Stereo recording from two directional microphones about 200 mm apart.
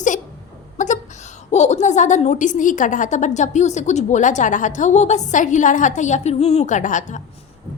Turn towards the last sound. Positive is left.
turn(degrees=40)  # may be behind; listen again after turning